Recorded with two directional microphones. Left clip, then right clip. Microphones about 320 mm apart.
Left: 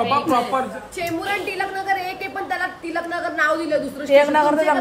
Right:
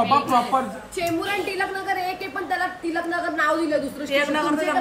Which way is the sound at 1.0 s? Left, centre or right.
Centre.